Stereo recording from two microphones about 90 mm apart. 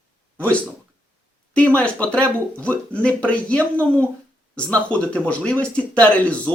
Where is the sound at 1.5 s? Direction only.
15° left (ahead or behind).